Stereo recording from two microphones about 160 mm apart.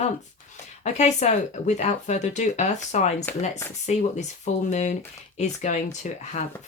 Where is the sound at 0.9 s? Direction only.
45° left (ahead or behind).